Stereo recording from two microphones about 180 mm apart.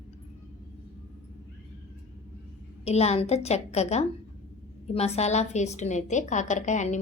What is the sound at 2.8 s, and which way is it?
A woman's voice, 35° left (ahead or behind).